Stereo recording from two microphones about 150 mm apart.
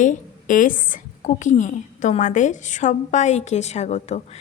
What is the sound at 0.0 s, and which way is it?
A woman's voice, 60° left (ahead or behind).